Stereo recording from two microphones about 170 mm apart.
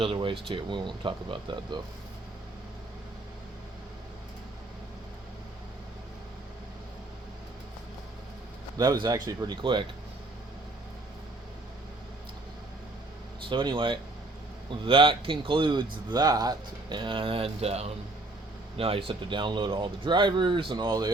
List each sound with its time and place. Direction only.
0.0 s speech: 30° right (ahead or behind)
8.8 s speech: 25° right (ahead or behind)
13.5 s speech: 30° right (ahead or behind)